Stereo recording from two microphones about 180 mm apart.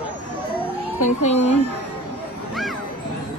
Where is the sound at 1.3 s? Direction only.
35° left (ahead or behind).